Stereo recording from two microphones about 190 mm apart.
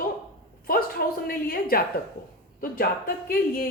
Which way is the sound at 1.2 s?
50° left (ahead or behind).